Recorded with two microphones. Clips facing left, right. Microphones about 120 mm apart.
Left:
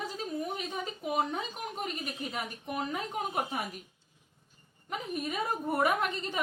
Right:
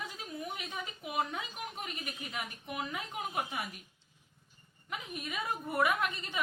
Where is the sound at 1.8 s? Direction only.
40° left (ahead or behind).